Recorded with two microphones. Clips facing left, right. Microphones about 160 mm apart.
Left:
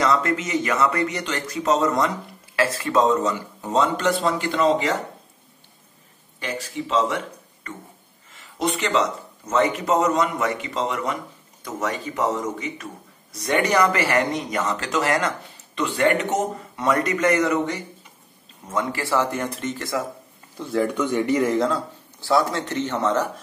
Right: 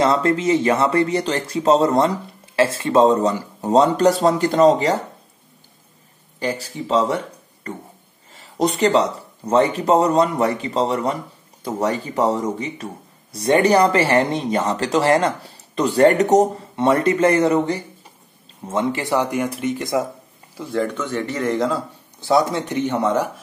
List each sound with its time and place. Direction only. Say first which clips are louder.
0.0 s speech: right 4 dB; 30° right (ahead or behind)
6.4 s speech: right 4 dB; 35° right (ahead or behind)
7.7 s a sound: right 6 dB; 35° right (ahead or behind)
8.3 s speech: right 5 dB; 35° right (ahead or behind); by 20.1 s 20° right (ahead or behind)
20.5 s speech: even; centre (ahead or behind)
20.9 s speech: left 4 dB; 15° left (ahead or behind)
22.2 s speech: right 3 dB; 20° right (ahead or behind)